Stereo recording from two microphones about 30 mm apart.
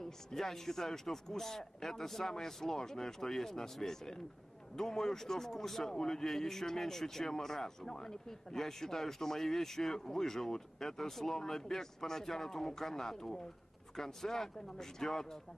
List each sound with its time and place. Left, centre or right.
0.0 s a man's voice: centre